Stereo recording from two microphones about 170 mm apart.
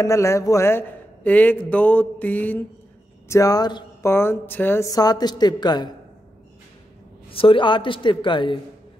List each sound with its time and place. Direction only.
0.0 s a man's voice: 15° left (ahead or behind)
7.2 s speech: 30° left (ahead or behind)